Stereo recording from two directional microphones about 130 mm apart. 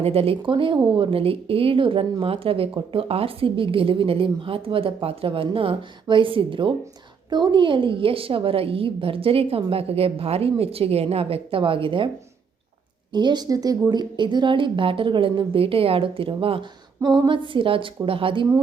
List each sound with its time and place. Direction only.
0.0 s speech: 50° right (ahead or behind)
13.1 s a woman's voice: 35° right (ahead or behind)
17.0 s a woman's voice: 35° right (ahead or behind)